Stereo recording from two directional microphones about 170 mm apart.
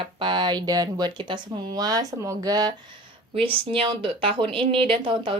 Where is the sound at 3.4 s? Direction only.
35° right (ahead or behind).